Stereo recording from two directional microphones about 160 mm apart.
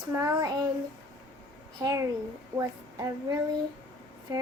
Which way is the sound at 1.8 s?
20° right (ahead or behind).